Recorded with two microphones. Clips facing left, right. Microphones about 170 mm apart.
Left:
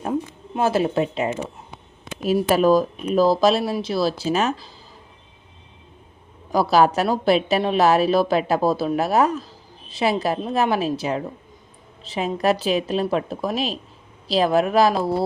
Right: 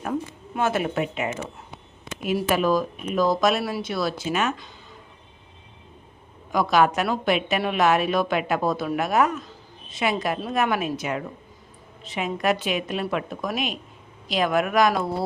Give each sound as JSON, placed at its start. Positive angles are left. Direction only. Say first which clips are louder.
{"t": 0.0, "sound": "speech", "louder": "left 3 dB", "side_deg": 25}
{"t": 6.5, "sound": "speech", "louder": "left 3 dB", "side_deg": 35}